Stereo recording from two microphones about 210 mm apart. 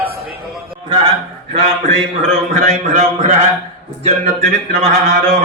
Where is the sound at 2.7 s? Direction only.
35° right (ahead or behind).